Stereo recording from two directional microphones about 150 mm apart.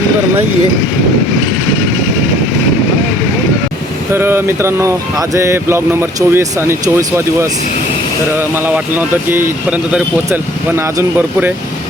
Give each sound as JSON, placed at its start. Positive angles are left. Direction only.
{"t": 4.1, "sound": "speech", "side_deg": -15}